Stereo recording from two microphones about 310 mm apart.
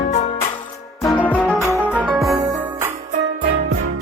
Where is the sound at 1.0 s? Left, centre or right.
Centre.